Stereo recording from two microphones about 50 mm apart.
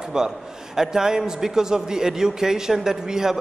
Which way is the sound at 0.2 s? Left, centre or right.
Centre.